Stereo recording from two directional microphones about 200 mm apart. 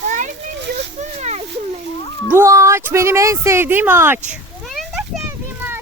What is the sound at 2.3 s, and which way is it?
Speech, 15° right (ahead or behind).